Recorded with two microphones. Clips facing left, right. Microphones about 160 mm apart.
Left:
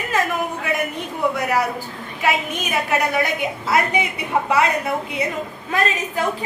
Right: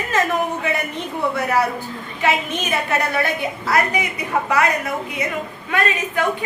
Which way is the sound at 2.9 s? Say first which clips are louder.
Left 2 dB; 15° left (ahead or behind).